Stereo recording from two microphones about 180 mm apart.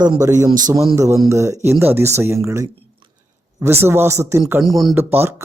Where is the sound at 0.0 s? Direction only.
20° right (ahead or behind).